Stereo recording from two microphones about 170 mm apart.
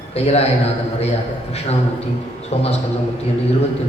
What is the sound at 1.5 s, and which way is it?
A man's voice, 40° left (ahead or behind).